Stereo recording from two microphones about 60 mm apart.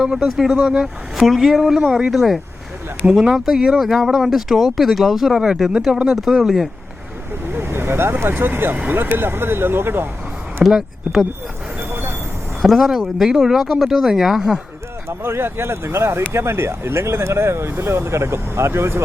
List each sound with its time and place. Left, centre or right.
0.0 s speech: centre
1.3 s speech: centre
7.5 s vehicle: right
8.3 s speech: right
10.6 s speech: centre
11.8 s vehicle: right
12.6 s speech: centre
15.2 s speech: right